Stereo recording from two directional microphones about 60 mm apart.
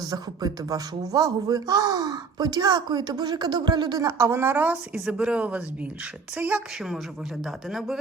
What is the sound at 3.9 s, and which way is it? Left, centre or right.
Speech, right.